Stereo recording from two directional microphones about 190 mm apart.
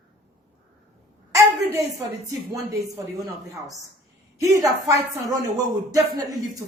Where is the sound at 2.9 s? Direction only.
15° right (ahead or behind).